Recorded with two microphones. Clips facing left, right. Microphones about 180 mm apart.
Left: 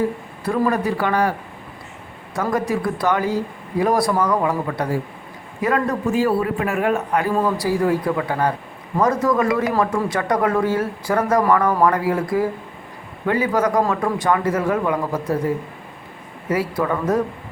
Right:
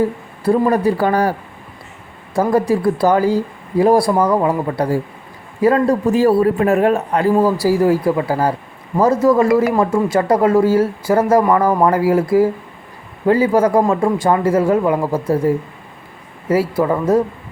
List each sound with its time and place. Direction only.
0.4 s a man's voice: 30° right (ahead or behind)
2.3 s a man's voice: 30° right (ahead or behind)
16.5 s a man's voice: 30° right (ahead or behind)